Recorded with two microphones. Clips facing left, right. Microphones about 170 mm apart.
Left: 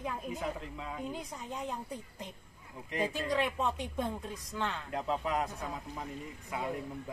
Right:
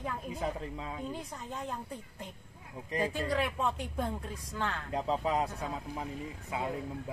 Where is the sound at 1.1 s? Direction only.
Centre (ahead or behind).